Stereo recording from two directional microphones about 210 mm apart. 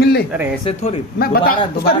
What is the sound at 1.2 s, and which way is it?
Speech, 45° left (ahead or behind).